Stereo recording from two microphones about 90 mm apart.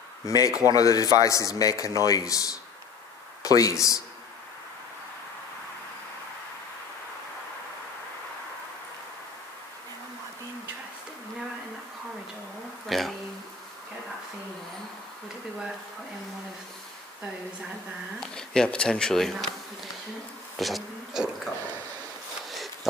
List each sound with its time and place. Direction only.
0.2 s a man's voice: 40° left (ahead or behind)
12.8 s a sound: centre (ahead or behind)
18.2 s speech: 10° left (ahead or behind)
20.5 s insect: centre (ahead or behind)